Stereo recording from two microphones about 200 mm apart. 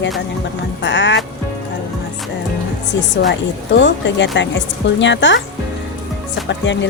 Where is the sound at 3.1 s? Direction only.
60° left (ahead or behind).